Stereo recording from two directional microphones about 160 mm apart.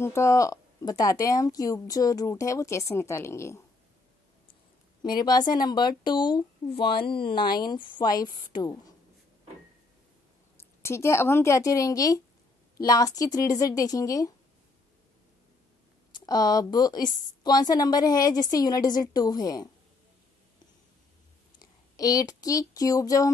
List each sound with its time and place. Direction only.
0.0 s a woman's voice: 20° left (ahead or behind)
5.0 s a woman's voice: 25° left (ahead or behind)
10.8 s a woman's voice: 15° left (ahead or behind)
16.2 s a woman's voice: 25° left (ahead or behind)
21.5 s speech: 20° left (ahead or behind)